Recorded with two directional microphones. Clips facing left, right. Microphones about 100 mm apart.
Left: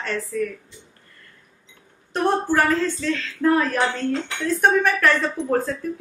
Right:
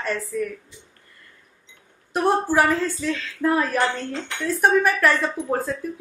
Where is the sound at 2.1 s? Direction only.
10° right (ahead or behind).